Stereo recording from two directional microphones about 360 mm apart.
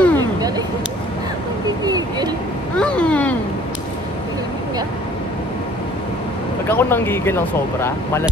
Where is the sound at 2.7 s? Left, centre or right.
Centre.